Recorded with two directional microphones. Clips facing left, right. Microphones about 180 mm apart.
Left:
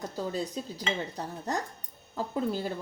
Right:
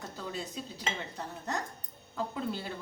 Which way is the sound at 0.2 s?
40° left (ahead or behind).